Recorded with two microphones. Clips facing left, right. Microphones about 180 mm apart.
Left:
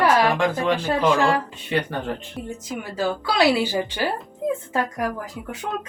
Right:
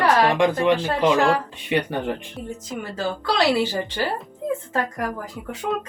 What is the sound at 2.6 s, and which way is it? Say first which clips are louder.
A woman's voice: left 2 dB; 10° left (ahead or behind).